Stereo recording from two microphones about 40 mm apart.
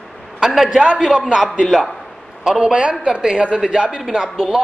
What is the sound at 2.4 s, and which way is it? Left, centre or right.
A woman's voice, centre.